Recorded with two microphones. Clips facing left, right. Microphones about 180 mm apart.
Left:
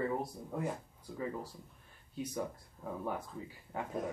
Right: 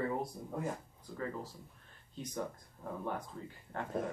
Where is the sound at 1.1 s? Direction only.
15° left (ahead or behind).